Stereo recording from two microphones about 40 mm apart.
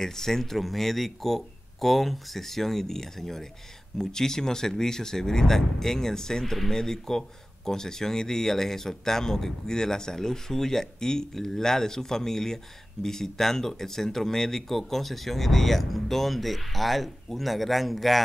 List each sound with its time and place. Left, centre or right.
0.0 s speech: centre